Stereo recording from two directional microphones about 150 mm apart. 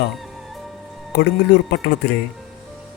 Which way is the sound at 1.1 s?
90° left.